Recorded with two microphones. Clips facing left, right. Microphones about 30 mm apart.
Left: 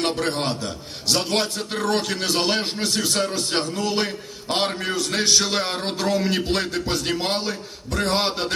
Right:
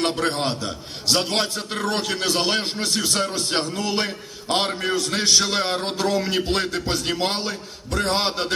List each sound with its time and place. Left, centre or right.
0.1 s a man's voice: centre